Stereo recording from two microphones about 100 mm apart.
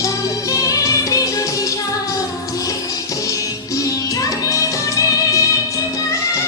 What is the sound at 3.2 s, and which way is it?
Music, 35° left (ahead or behind).